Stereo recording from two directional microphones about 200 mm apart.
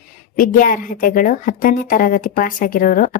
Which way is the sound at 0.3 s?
45° left (ahead or behind).